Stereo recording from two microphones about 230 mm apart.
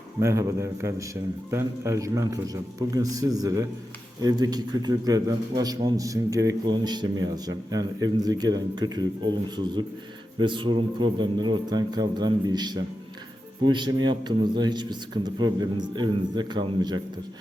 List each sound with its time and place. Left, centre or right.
0.2 s a man's voice: centre
10.3 s a man's voice: right